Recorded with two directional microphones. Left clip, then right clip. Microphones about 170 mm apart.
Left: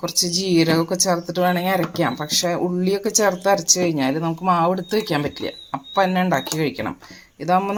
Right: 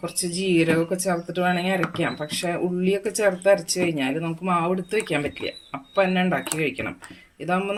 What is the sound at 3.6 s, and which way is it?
Speech, 40° left (ahead or behind).